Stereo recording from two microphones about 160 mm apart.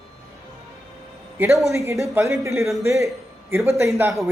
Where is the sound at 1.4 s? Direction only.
10° right (ahead or behind).